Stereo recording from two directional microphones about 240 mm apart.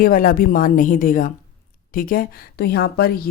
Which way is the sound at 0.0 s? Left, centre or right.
Left.